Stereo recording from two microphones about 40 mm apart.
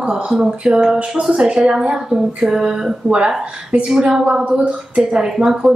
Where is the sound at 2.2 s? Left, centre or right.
Centre.